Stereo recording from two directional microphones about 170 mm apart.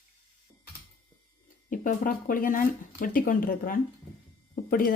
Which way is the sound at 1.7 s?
55° left (ahead or behind).